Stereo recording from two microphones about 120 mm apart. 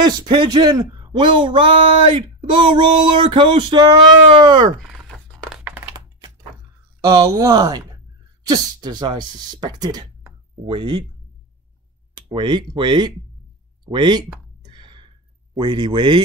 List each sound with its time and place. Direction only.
0.0 s speech: 40° right (ahead or behind)
5.6 s computer keyboard: 15° right (ahead or behind)
7.1 s speech: 30° right (ahead or behind)
12.2 s speech: 40° right (ahead or behind)
14.6 s a sound: 40° right (ahead or behind)
15.5 s speech: 40° right (ahead or behind)